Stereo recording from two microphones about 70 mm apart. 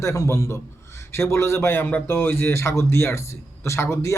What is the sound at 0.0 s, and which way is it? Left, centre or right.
Speech, left.